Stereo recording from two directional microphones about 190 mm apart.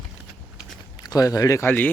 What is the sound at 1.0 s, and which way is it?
Speech, 20° left (ahead or behind).